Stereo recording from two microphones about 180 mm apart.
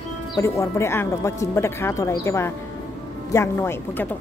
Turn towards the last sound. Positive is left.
turn(degrees=15)  # may be behind; listen again after turning